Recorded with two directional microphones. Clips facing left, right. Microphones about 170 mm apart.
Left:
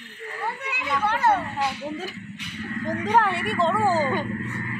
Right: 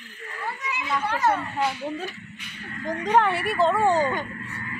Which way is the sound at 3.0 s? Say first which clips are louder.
Right 2 dB; centre (ahead or behind).